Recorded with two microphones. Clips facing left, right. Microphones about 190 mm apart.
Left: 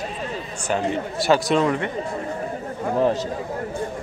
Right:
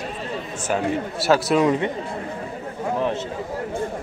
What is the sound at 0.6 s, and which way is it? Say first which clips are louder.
Speech: even; 5° right (ahead or behind).